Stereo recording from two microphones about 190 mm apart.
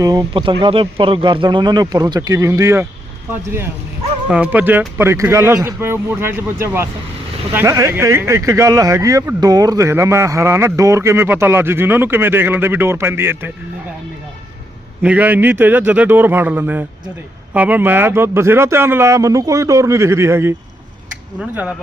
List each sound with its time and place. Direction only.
0.0 s speech: 20° right (ahead or behind)
4.3 s speech: 10° right (ahead or behind)
15.0 s speech: 10° right (ahead or behind)